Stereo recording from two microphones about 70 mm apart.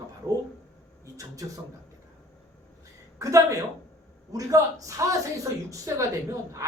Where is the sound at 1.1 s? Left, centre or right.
Right.